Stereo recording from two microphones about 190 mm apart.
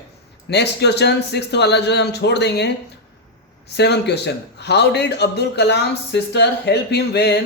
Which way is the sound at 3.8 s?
60° left (ahead or behind).